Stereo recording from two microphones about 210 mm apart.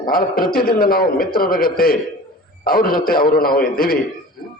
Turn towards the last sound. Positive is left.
turn(degrees=45)  # may be behind; listen again after turning